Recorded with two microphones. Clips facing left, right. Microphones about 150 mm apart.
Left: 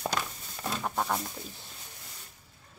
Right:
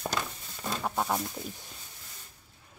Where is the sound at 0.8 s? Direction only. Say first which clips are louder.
Right 1 dB; 5° right (ahead or behind).